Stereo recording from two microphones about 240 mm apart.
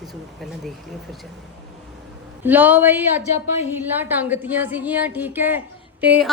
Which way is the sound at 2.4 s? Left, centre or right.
Centre.